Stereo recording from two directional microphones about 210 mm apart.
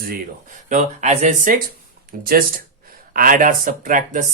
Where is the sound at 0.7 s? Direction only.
35° right (ahead or behind).